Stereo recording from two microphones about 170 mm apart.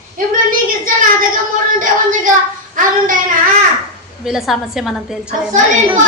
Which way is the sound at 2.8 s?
50° right (ahead or behind).